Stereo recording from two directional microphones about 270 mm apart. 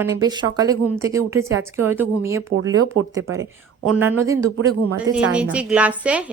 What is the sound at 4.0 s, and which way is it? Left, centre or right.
A woman's voice, centre.